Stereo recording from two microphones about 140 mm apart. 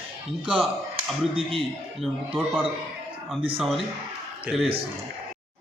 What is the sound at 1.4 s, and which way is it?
Speech, 40° right (ahead or behind).